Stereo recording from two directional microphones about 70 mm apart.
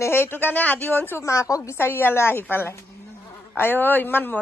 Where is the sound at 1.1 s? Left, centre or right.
Left.